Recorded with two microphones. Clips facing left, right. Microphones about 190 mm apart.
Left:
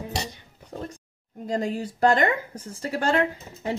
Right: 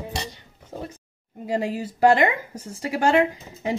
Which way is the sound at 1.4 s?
10° right (ahead or behind).